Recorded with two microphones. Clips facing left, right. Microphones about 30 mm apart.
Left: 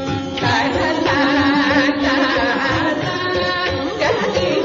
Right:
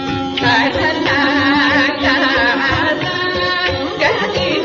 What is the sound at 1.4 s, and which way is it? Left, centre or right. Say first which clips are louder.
Music: right 2 dB; right.